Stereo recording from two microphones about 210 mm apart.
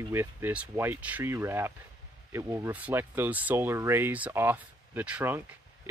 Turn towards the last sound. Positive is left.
turn(degrees=-10)  # may be behind; listen again after turning